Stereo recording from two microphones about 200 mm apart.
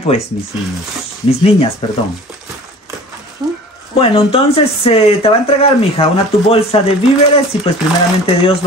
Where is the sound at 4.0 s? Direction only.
30° left (ahead or behind).